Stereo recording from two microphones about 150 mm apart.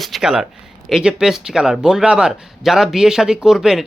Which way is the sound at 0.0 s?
Centre (ahead or behind).